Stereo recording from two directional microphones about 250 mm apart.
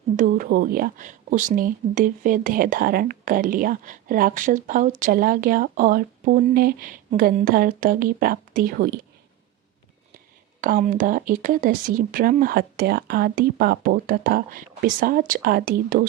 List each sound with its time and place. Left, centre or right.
0.2 s speech: right
10.6 s speech: right